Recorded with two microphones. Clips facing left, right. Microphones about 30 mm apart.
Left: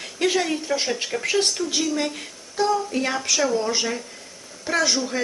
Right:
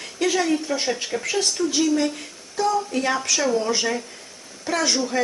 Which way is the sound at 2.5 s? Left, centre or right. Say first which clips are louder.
Even; left.